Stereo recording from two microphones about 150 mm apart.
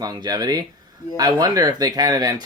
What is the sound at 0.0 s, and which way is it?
Speech, 25° right (ahead or behind).